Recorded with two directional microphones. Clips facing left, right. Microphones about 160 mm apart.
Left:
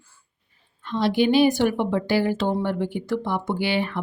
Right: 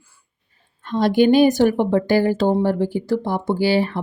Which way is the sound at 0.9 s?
45° right (ahead or behind).